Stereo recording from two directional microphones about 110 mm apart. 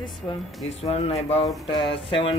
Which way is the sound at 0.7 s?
65° left (ahead or behind).